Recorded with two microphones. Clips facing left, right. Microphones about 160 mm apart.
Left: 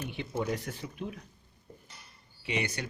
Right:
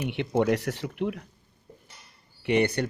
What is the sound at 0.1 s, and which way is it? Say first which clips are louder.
A man's voice: right 10 dB; 70° right (ahead or behind).